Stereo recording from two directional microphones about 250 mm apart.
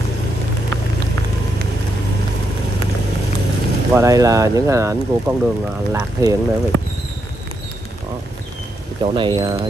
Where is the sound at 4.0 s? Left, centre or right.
Centre.